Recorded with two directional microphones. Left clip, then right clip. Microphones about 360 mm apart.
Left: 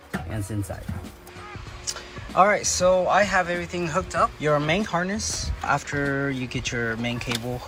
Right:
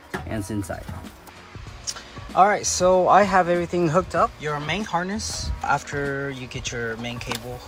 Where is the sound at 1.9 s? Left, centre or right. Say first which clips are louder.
Right 2 dB; centre.